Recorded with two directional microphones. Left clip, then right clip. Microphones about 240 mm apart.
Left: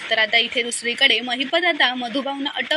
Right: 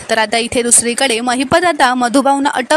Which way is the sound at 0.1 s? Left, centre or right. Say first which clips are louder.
Right 4 dB; right.